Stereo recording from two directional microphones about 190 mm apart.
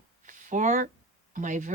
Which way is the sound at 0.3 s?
40° right (ahead or behind).